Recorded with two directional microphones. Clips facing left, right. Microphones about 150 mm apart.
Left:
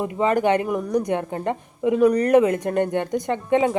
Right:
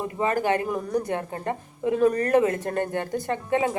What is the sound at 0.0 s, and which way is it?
A woman's voice, 20° left (ahead or behind).